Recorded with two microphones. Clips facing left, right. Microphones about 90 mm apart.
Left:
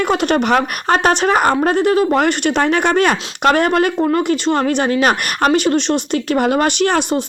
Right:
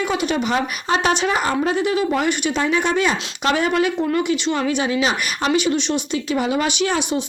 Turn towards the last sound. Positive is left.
turn(degrees=55)  # may be behind; listen again after turning